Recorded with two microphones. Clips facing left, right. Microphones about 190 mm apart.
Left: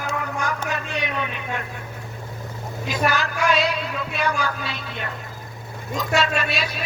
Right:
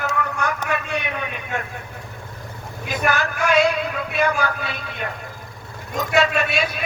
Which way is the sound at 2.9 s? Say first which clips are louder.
Right 1 dB; 50° right (ahead or behind).